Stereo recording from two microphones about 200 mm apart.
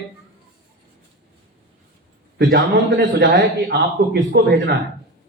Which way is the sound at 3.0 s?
50° right (ahead or behind).